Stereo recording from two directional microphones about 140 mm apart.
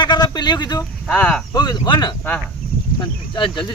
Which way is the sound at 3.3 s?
35° left (ahead or behind).